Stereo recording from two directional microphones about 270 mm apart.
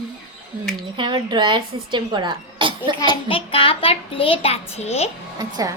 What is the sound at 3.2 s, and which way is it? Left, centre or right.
A child's voice, centre.